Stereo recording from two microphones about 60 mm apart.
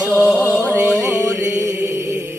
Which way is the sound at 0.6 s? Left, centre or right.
Right.